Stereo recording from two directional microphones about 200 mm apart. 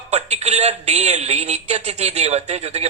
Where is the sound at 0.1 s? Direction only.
30° right (ahead or behind).